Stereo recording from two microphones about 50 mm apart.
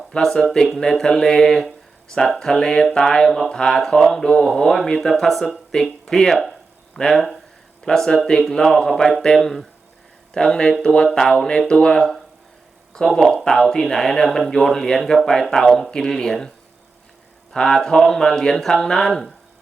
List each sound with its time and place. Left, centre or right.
0.2 s speech: centre
3.2 s speech: centre
3.5 s speech: centre
5.7 s a sound: centre
7.0 s speech: centre
13.0 s speech: left
13.3 s speech: centre
17.5 s speech: centre